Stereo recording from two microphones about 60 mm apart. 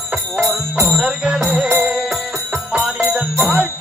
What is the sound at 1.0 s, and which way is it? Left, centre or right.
Music, centre.